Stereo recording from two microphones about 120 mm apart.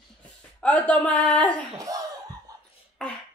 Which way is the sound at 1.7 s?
30° right (ahead or behind).